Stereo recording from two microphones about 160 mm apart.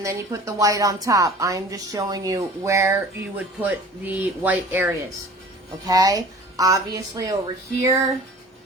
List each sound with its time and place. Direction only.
0.0 s a woman's voice: 20° right (ahead or behind)
5.8 s a woman's voice: 25° right (ahead or behind)